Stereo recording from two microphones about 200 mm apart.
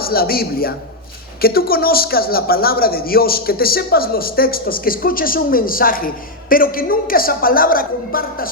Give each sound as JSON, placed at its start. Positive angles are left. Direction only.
{"t": 0.0, "sound": "a woman's voice", "side_deg": 50}